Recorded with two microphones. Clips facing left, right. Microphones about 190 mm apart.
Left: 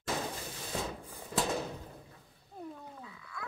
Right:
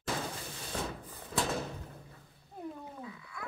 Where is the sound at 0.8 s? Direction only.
5° left (ahead or behind).